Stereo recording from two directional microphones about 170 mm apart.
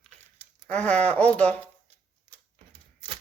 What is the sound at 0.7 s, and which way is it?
Speech, 5° left (ahead or behind).